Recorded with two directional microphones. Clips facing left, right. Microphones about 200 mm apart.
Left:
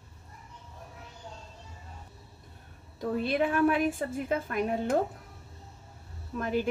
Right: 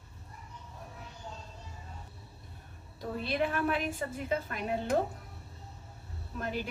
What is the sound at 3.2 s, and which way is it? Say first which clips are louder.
A woman's voice: left 5 dB; 50° left (ahead or behind).